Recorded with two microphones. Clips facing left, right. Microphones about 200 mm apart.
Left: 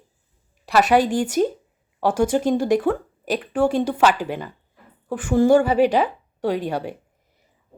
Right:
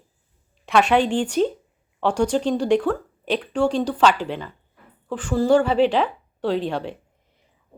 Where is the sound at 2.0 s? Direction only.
5° left (ahead or behind).